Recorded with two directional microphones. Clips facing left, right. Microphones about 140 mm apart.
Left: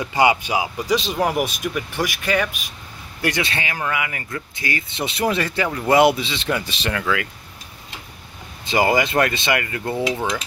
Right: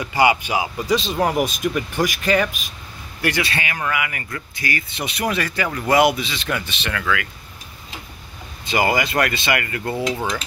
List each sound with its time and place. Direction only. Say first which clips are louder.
0.0 s speech: even; 25° left (ahead or behind)
0.6 s speech: even; 15° left (ahead or behind)
3.2 s speech: even; 20° left (ahead or behind)
8.6 s speech: left 2 dB; 25° left (ahead or behind)
10.0 s speech: left 1 dB; centre (ahead or behind)